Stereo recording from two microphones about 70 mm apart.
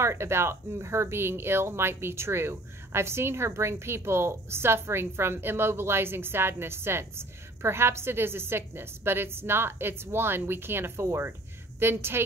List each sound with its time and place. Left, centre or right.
0.0 s speech: right